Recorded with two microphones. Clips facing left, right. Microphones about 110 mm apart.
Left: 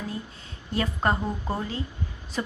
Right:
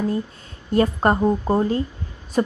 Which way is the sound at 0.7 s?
45° right (ahead or behind).